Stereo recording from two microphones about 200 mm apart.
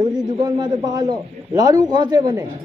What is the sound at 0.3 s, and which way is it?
A man's voice, 20° right (ahead or behind).